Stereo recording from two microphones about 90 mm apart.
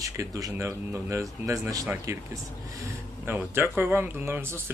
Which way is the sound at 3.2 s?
25° right (ahead or behind).